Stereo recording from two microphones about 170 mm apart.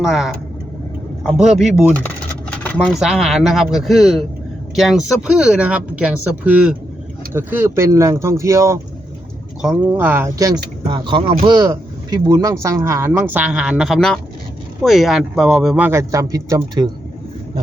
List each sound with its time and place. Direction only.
0.0 s speech: centre (ahead or behind)
2.6 s speech: 5° left (ahead or behind); by 8.8 s 15° right (ahead or behind)
9.8 s speech: 15° right (ahead or behind)